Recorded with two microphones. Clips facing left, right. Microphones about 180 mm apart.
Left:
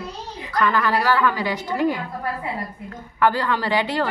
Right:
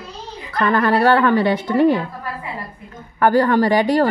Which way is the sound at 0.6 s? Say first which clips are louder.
Right 5 dB; 55° right (ahead or behind).